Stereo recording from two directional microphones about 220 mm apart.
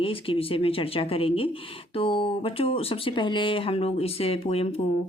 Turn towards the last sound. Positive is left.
turn(degrees=25)  # may be behind; listen again after turning